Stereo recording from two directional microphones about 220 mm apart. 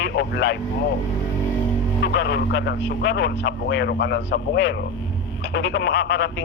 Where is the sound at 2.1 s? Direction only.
50° left (ahead or behind).